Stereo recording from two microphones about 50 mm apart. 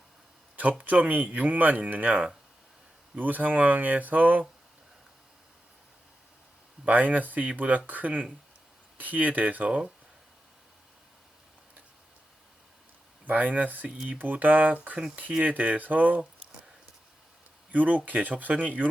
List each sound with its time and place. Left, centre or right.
0.5 s speech: right
3.2 s speech: right
6.8 s speech: right
13.2 s speech: right
17.7 s speech: right